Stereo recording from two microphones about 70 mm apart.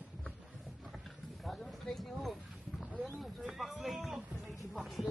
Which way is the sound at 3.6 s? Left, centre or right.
Centre.